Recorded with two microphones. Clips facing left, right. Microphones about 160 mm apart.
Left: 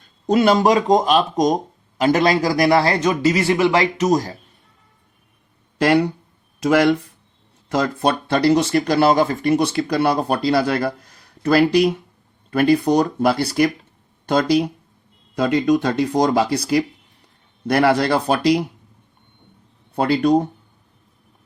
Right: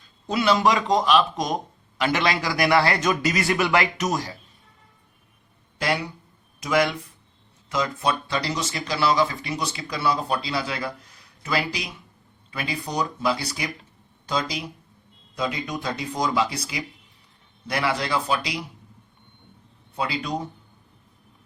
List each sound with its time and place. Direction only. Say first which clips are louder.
0.3 s speech: left 6 dB; 45° left (ahead or behind); by 4.2 s 30° left (ahead or behind)
5.8 s speech: left 10 dB; 65° left (ahead or behind)
20.0 s speech: left 12 dB; 60° left (ahead or behind)